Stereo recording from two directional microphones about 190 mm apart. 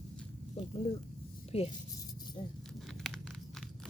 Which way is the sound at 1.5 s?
30° left (ahead or behind).